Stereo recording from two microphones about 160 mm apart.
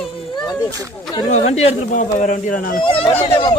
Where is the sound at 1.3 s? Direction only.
40° left (ahead or behind).